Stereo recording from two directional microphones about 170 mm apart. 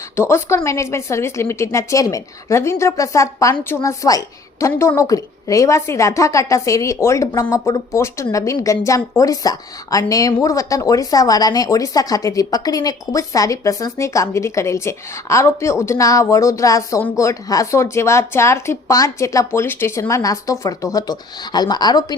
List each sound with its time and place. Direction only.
0.2 s a woman's voice: 15° left (ahead or behind)